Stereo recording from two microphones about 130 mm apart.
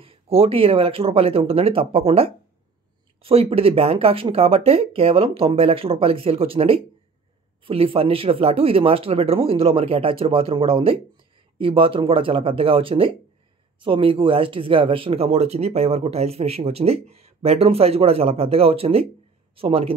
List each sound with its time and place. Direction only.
0.0 s speech: 45° right (ahead or behind)